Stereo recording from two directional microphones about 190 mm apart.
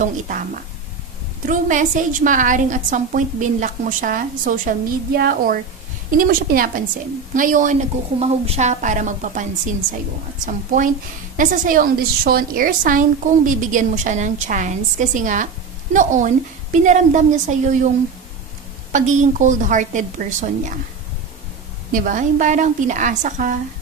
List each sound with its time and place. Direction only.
0.0 s a woman's voice: 40° right (ahead or behind)
21.9 s a woman's voice: 45° right (ahead or behind)